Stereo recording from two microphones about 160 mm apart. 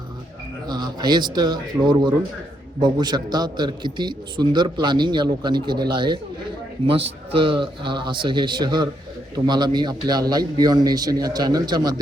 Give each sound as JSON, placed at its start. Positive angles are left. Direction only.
{"t": 0.7, "sound": "a man's voice", "side_deg": -25}